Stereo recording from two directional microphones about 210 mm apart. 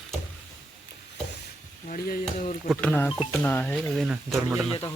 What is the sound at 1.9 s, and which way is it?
Speech, 45° left (ahead or behind).